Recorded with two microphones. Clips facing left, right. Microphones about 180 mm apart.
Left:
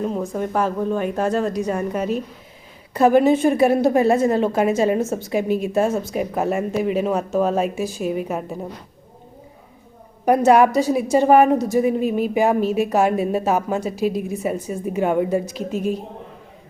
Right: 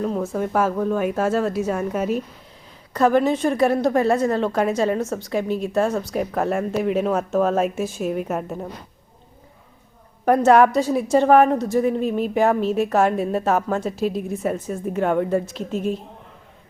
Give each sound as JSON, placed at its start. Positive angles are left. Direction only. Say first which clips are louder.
{"t": 0.0, "sound": "a sound", "louder": "even", "side_deg": 10}
{"t": 0.3, "sound": "speech", "louder": "right 1 dB", "side_deg": -5}
{"t": 2.9, "sound": "a woman's voice", "louder": "left 3 dB", "side_deg": 10}
{"t": 4.9, "sound": "a woman's voice", "louder": "left 3 dB", "side_deg": 25}
{"t": 5.3, "sound": "speech", "louder": "left 2 dB", "side_deg": 10}
{"t": 10.2, "sound": "a woman's voice", "louder": "even", "side_deg": 10}